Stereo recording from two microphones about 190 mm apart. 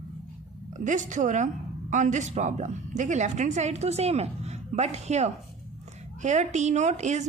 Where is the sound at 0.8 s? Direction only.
40° right (ahead or behind).